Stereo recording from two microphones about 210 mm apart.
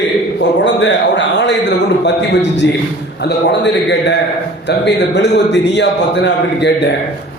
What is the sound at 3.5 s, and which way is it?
A man's voice, 55° left (ahead or behind).